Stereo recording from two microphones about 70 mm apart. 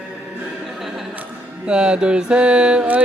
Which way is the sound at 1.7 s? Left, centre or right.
Centre.